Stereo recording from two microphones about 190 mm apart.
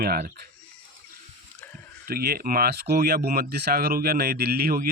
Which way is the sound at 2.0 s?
55° right (ahead or behind).